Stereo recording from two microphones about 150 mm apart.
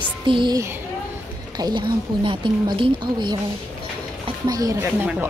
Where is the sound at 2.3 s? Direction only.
35° right (ahead or behind).